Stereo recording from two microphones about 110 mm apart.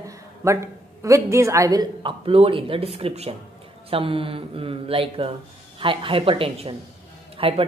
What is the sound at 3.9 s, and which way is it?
A woman's voice, 55° right (ahead or behind).